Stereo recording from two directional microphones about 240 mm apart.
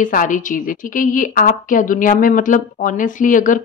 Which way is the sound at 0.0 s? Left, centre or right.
Left.